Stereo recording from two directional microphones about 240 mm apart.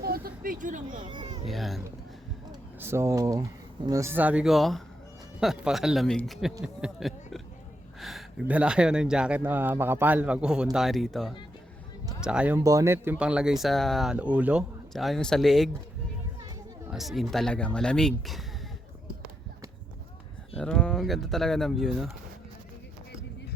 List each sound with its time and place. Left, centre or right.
0.0 s a sound: right
1.0 s speech: centre
1.5 s speech: centre
2.8 s speech: centre
6.5 s speech: centre
8.0 s speech: centre
16.9 s speech: centre
20.6 s speech: centre